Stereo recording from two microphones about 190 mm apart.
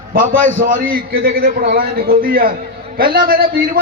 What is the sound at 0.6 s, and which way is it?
A man's voice, 50° right (ahead or behind).